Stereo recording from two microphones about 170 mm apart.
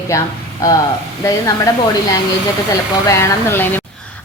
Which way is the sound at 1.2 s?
20° left (ahead or behind).